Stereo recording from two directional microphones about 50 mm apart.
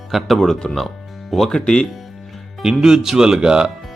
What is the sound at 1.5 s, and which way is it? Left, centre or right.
Speech, centre.